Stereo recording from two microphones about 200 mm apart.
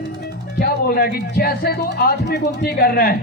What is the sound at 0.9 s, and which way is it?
A man's voice, 50° left (ahead or behind).